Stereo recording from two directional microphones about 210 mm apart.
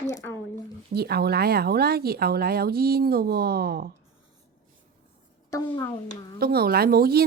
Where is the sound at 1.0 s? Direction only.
50° right (ahead or behind).